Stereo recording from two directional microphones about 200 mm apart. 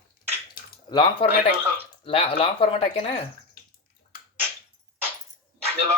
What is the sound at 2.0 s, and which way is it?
Speech, 25° left (ahead or behind).